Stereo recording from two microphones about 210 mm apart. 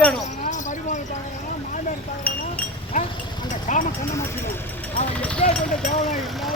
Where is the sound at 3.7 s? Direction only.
35° left (ahead or behind).